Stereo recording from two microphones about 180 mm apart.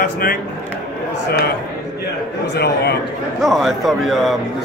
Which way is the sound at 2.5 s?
65° left (ahead or behind).